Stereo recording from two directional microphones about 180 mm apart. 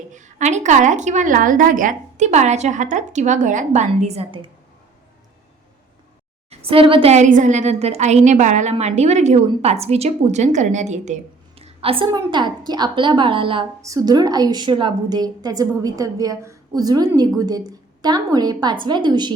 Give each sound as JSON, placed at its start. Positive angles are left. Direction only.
{"t": 0.1, "sound": "a woman's voice", "side_deg": -45}
{"t": 6.5, "sound": "a woman's voice", "side_deg": -30}